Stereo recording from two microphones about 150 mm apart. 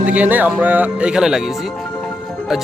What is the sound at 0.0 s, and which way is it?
Speech, 10° right (ahead or behind).